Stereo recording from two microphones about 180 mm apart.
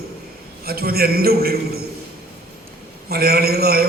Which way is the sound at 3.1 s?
60° right (ahead or behind).